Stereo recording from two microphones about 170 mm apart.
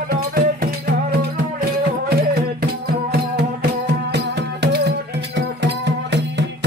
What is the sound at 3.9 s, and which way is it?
Music, 80° right.